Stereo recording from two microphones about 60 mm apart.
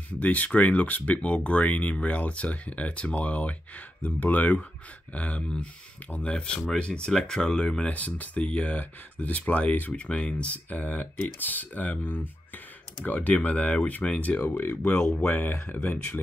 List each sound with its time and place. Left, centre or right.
0.2 s speech: left
6.3 s speech: centre
7.9 s speech: left
14.5 s speech: left
14.8 s speech: left
15.1 s speech: left